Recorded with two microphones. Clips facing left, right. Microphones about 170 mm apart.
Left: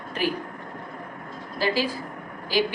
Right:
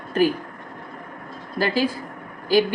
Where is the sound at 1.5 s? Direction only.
50° right (ahead or behind).